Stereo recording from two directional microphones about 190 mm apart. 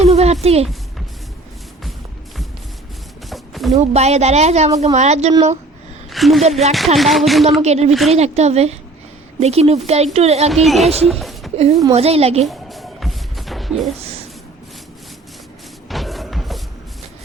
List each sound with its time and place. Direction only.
0.0 s a sound: 30° right (ahead or behind)
0.4 s speech: 35° right (ahead or behind)
3.2 s a sound: centre (ahead or behind)
3.8 s speech: 35° right (ahead or behind)
6.1 s a woman's voice: centre (ahead or behind)
6.7 s a sound: centre (ahead or behind)
7.6 s speech: 35° right (ahead or behind)
10.5 s a woman's voice: centre (ahead or behind)
11.5 s a woman's voice: 35° right (ahead or behind)
12.5 s music: centre (ahead or behind)
15.9 s music: centre (ahead or behind)